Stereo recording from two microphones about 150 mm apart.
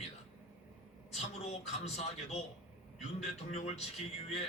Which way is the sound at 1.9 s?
45° left (ahead or behind).